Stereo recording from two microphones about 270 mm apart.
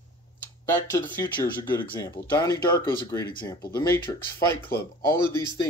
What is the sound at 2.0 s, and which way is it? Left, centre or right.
Speech, centre.